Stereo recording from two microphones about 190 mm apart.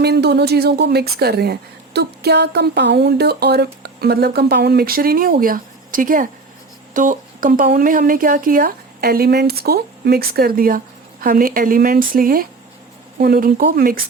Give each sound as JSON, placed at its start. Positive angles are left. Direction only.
{"t": 0.0, "sound": "speech", "side_deg": -60}